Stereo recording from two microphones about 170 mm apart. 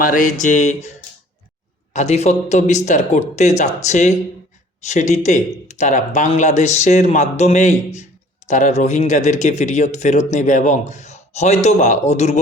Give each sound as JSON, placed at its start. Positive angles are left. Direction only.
{"t": 0.0, "sound": "speech", "side_deg": 55}